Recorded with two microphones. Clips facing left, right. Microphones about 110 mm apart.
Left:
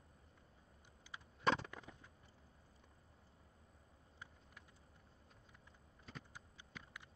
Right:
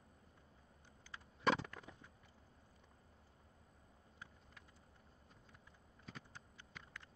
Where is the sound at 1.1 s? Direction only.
15° left (ahead or behind).